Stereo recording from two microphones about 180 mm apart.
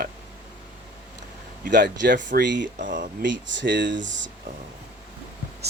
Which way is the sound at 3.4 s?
85° right.